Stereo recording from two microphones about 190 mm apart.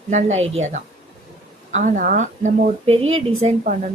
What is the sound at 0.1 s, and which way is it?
A woman's voice, 40° right (ahead or behind).